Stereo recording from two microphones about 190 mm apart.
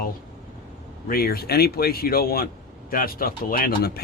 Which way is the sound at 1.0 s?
50° left (ahead or behind).